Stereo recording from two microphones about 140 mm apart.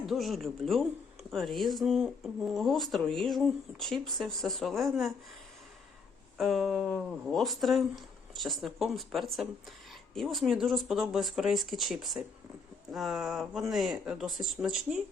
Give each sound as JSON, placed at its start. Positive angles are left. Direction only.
{"t": 0.0, "sound": "speech", "side_deg": 0}
{"t": 6.3, "sound": "speech", "side_deg": 0}